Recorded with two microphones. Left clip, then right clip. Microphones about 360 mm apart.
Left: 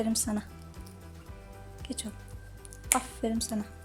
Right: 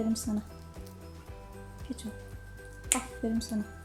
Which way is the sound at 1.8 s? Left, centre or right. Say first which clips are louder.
Left 2 dB; left.